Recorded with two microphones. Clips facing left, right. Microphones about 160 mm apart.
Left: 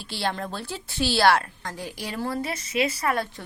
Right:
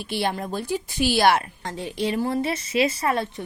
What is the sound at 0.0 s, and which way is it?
A woman's voice, 20° right (ahead or behind).